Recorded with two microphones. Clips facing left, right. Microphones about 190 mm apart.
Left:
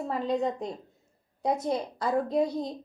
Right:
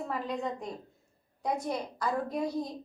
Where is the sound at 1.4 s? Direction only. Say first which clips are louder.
Left 4 dB; 25° left (ahead or behind).